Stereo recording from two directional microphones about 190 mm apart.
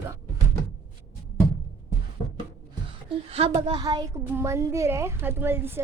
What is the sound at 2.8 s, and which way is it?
A woman's voice, 30° right (ahead or behind).